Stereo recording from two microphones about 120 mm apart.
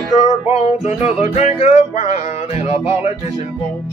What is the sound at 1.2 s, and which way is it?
Music, 70° left (ahead or behind).